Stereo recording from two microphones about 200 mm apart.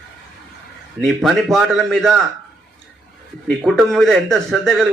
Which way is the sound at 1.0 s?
Centre (ahead or behind).